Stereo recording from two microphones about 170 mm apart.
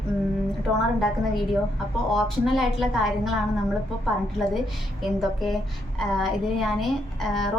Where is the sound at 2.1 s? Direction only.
Centre (ahead or behind).